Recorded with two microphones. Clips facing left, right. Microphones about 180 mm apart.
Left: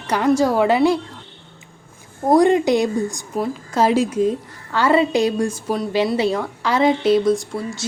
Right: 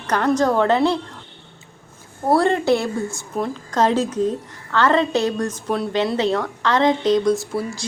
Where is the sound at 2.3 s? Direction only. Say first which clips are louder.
Left 3 dB; 15° left (ahead or behind).